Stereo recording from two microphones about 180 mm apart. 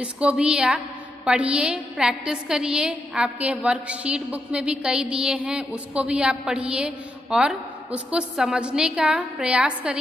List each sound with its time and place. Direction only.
0.0 s a woman's voice: 5° right (ahead or behind)